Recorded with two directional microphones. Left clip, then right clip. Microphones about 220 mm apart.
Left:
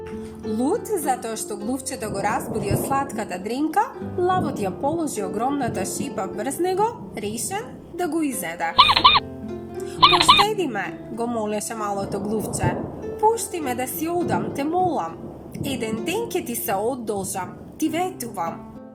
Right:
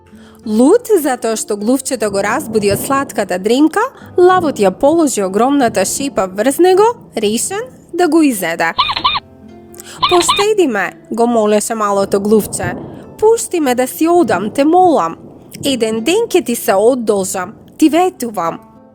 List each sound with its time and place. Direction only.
0.5 s speech: 50° right (ahead or behind)
8.7 s speech: centre (ahead or behind)
10.5 s speech: 50° right (ahead or behind)